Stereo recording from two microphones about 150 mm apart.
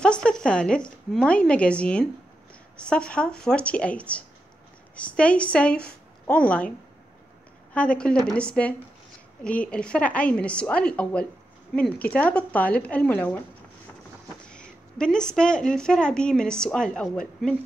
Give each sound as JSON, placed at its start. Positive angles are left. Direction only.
{"t": 0.0, "sound": "a woman's voice", "side_deg": 5}
{"t": 7.7, "sound": "a woman's voice", "side_deg": 10}
{"t": 14.4, "sound": "speech", "side_deg": 5}